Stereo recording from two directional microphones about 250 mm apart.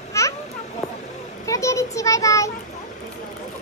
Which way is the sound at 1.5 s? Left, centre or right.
Centre.